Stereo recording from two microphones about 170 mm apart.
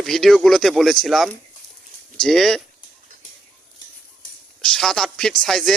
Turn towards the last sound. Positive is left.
turn(degrees=0)  # may be behind; listen again after turning